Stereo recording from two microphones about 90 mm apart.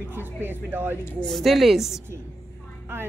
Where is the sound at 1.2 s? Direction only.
5° left (ahead or behind).